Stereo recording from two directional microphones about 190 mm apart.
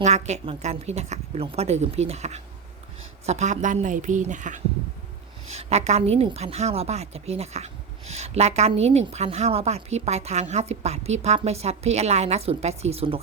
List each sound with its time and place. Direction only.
0.0 s a woman's voice: 35° right (ahead or behind)